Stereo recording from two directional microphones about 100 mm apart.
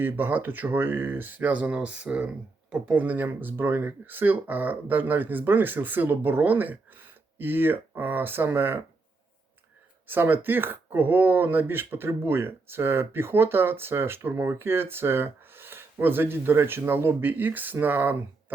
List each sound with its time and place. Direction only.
0.0 s speech: 20° right (ahead or behind)
10.1 s speech: 20° right (ahead or behind)